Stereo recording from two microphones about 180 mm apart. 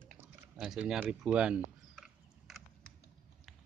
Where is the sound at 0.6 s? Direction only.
5° right (ahead or behind).